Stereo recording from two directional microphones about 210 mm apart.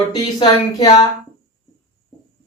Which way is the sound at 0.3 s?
20° left (ahead or behind).